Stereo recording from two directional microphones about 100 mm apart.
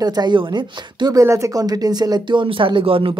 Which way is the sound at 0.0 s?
45° right (ahead or behind).